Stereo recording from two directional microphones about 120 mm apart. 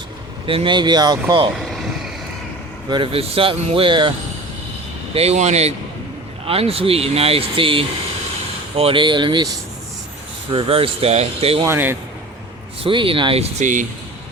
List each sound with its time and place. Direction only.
0.4 s speech: 45° right (ahead or behind)
2.9 s speech: 50° right (ahead or behind)
5.1 s speech: 60° right (ahead or behind)
6.4 s speech: 55° right (ahead or behind)
10.5 s speech: 50° right (ahead or behind)
11.6 s a man's voice: 20° right (ahead or behind)
12.8 s speech: 45° right (ahead or behind)
13.6 s speech: 90° right